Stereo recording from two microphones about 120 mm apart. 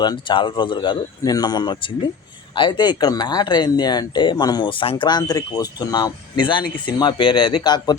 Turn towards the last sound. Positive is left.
turn(degrees=35)  # may be behind; listen again after turning